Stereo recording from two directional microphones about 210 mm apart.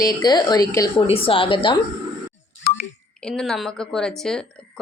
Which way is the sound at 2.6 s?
45° left (ahead or behind).